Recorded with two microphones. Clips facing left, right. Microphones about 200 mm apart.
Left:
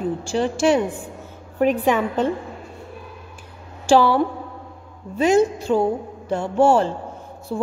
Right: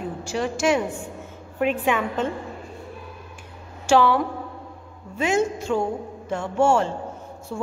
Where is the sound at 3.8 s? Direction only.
35° left (ahead or behind).